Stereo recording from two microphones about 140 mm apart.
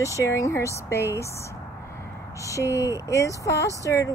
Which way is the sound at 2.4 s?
20° left (ahead or behind).